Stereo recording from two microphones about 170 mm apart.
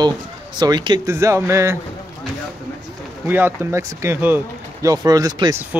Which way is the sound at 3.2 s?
15° right (ahead or behind).